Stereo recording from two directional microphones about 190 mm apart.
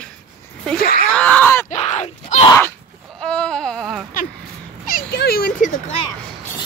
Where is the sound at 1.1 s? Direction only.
5° left (ahead or behind).